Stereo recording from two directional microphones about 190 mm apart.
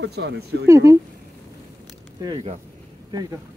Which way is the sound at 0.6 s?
15° right (ahead or behind).